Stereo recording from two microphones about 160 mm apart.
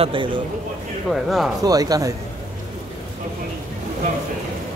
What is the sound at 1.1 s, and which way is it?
Speech, centre (ahead or behind).